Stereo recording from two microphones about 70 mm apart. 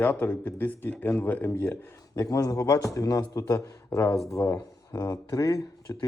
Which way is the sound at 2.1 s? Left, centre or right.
Left.